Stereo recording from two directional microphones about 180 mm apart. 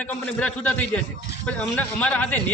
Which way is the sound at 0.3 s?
10° left (ahead or behind).